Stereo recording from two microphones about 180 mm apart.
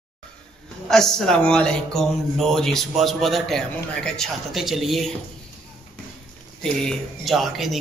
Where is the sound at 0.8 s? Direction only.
Centre (ahead or behind).